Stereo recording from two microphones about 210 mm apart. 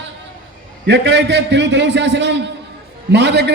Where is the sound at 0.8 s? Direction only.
50° right (ahead or behind).